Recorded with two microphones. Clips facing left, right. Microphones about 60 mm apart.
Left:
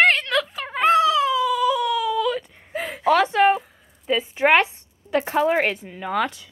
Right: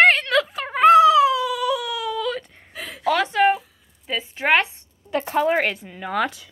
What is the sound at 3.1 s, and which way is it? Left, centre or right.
Speech, centre.